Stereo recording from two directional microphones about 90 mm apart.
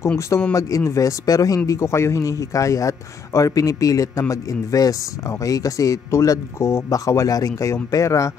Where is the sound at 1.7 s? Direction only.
30° left (ahead or behind).